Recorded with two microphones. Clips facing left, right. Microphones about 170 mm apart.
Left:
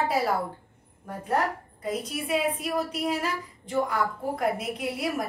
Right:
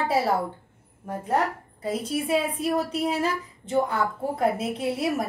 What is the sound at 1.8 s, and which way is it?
A woman's voice, 30° right (ahead or behind).